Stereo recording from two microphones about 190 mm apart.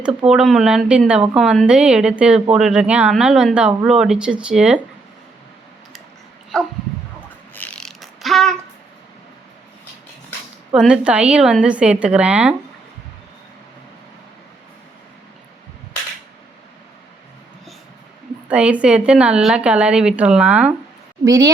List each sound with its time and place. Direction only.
0.3 s a woman's voice: centre (ahead or behind)
6.5 s a woman's voice: centre (ahead or behind)
7.5 s mechanisms: 10° left (ahead or behind)
10.8 s a woman's voice: 5° right (ahead or behind)
18.4 s a woman's voice: 5° right (ahead or behind)
21.2 s a woman's voice: 15° right (ahead or behind)